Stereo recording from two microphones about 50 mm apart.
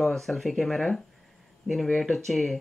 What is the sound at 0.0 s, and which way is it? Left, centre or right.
Speech, centre.